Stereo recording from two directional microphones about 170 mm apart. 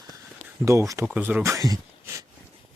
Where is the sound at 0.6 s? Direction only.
20° right (ahead or behind).